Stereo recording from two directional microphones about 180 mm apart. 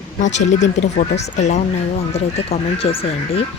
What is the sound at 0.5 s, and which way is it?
Speech, 40° left (ahead or behind).